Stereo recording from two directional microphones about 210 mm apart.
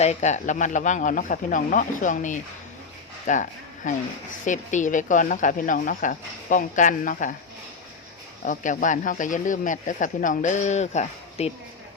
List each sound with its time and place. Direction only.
0.0 s speech: 35° left (ahead or behind)
8.4 s speech: 40° left (ahead or behind)